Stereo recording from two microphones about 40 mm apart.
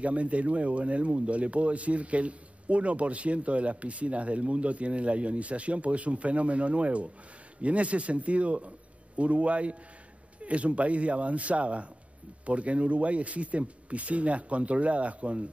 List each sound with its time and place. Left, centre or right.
0.0 s speech: right